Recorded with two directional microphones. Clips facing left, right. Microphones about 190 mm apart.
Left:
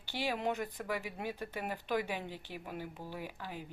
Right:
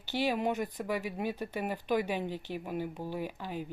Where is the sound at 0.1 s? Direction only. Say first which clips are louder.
Right 5 dB; 15° right (ahead or behind).